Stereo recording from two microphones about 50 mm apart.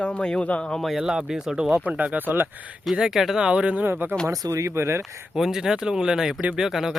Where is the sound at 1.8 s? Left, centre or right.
Right.